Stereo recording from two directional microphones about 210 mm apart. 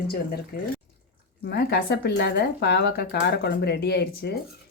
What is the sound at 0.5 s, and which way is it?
Speech, 45° left (ahead or behind).